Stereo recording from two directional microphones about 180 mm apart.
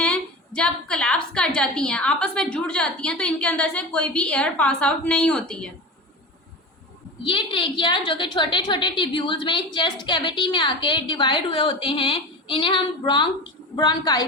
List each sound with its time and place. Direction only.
0.0 s a woman's voice: 5° left (ahead or behind)
7.3 s a woman's voice: 30° left (ahead or behind)